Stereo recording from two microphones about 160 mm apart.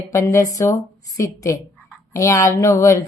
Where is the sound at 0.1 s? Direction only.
20° left (ahead or behind).